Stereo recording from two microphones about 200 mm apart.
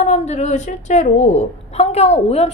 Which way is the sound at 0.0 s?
35° left (ahead or behind).